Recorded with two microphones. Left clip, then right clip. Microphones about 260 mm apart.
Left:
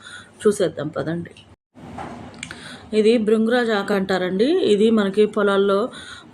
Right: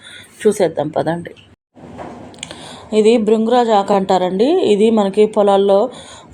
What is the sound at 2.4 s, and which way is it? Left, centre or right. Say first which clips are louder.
Speech: right 5 dB; centre.